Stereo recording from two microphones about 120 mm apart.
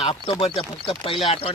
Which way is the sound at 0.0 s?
45° left (ahead or behind).